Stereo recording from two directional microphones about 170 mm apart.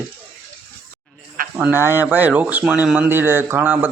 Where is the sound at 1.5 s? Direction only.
10° right (ahead or behind).